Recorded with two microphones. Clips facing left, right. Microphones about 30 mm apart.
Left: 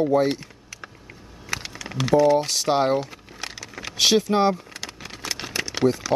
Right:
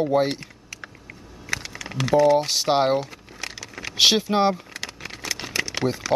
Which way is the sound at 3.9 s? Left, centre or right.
Centre.